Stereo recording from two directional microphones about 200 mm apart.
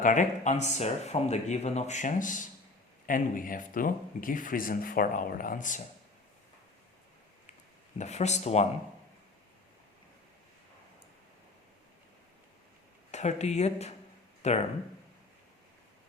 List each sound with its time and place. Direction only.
0.0 s speech: 40° left (ahead or behind)
7.9 s speech: 35° left (ahead or behind)
13.1 s speech: 35° left (ahead or behind)